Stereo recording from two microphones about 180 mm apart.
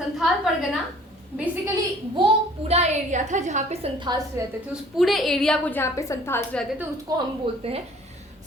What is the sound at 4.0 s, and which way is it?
Speech, 20° right (ahead or behind).